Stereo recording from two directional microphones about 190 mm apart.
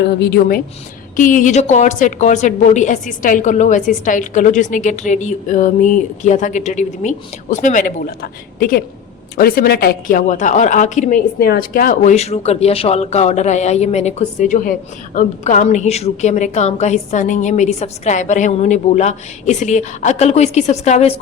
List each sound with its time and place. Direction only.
0.0 s a woman's voice: 60° left (ahead or behind); by 11.2 s 40° left (ahead or behind)
11.3 s speech: 55° left (ahead or behind); by 21.2 s 35° left (ahead or behind)